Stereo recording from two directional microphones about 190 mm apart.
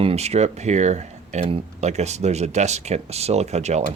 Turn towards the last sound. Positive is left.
turn(degrees=-35)  # may be behind; listen again after turning